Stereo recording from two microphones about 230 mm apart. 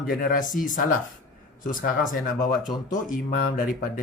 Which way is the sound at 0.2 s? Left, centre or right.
Left.